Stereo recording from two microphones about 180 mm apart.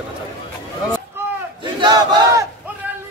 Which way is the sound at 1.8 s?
20° right (ahead or behind).